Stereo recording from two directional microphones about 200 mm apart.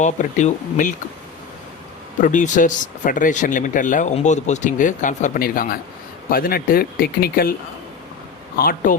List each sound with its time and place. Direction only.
0.0 s speech: 35° left (ahead or behind)
2.2 s speech: 40° left (ahead or behind)
8.5 s speech: 45° left (ahead or behind)